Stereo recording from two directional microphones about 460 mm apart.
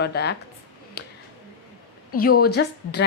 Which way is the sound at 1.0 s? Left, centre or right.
Left.